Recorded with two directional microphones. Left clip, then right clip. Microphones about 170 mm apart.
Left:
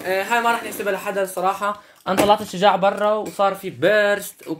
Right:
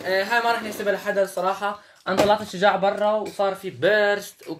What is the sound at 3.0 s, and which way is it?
Speech, 50° left (ahead or behind).